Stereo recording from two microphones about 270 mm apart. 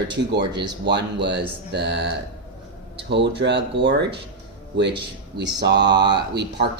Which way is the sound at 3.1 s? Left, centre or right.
Right.